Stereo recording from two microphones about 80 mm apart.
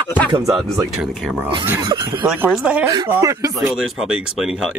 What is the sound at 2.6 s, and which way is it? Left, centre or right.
Speech, centre.